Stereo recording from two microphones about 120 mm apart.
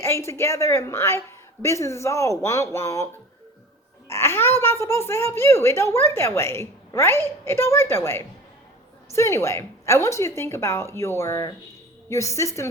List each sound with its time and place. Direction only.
0.0 s speech: 25° left (ahead or behind)
4.1 s speech: 20° left (ahead or behind)